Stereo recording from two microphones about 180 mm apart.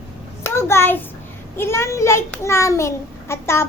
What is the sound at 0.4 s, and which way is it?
A child's voice, 15° left (ahead or behind).